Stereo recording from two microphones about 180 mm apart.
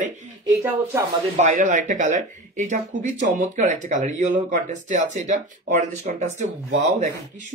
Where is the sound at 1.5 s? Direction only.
45° right (ahead or behind).